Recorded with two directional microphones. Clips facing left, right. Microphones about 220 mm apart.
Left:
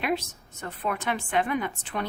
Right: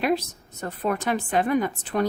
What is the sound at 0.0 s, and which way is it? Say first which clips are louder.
A woman's voice: right 5 dB; 40° right (ahead or behind).